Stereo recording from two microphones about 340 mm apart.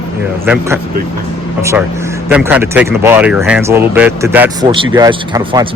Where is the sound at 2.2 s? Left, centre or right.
Centre.